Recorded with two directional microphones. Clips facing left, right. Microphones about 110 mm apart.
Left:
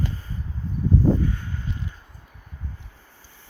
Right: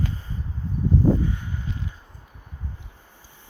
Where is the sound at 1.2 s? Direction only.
15° right (ahead or behind).